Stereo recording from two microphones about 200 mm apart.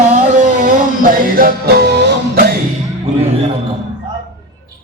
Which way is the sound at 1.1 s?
45° right (ahead or behind).